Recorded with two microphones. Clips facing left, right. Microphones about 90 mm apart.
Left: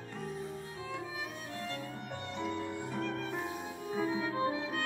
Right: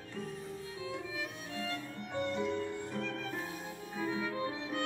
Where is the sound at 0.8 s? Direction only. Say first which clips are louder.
Right 1 dB; 35° left (ahead or behind).